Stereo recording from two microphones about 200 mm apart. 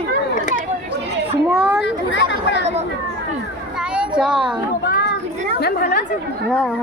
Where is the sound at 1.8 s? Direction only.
60° left (ahead or behind).